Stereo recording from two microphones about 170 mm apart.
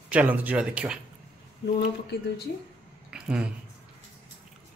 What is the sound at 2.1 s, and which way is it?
Speech, 80° left.